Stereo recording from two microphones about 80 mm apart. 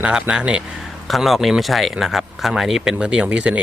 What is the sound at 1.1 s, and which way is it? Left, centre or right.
Speech, centre.